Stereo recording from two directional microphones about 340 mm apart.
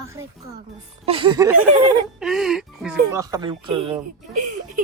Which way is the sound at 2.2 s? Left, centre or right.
Centre.